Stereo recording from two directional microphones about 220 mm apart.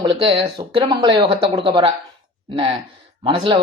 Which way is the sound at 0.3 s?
25° right (ahead or behind).